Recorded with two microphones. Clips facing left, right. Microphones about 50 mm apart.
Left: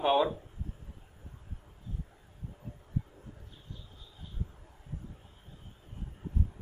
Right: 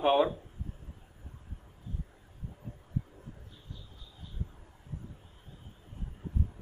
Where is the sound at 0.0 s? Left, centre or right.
Centre.